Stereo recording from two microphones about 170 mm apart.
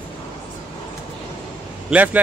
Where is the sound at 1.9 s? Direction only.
10° right (ahead or behind).